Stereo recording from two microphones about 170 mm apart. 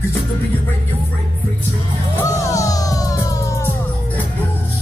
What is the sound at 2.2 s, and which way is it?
Music, 20° left (ahead or behind).